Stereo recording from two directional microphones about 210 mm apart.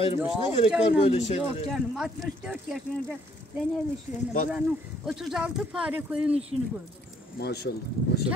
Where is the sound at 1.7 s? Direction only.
5° right (ahead or behind).